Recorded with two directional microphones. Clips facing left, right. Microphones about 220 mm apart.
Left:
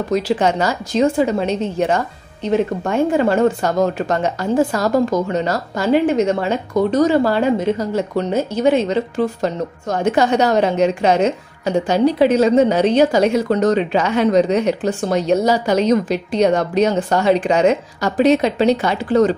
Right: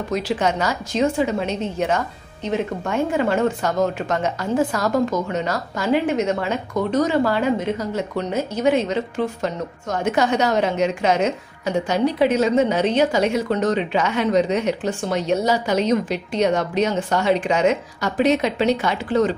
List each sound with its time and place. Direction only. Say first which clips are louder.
0.1 s speech: left 4 dB; 30° left (ahead or behind)